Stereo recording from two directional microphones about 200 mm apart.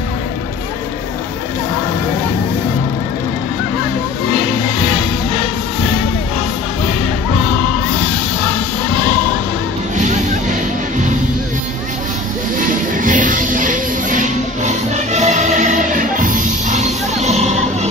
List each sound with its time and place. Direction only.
9.9 s music: 35° right (ahead or behind)
12.5 s music: 40° right (ahead or behind)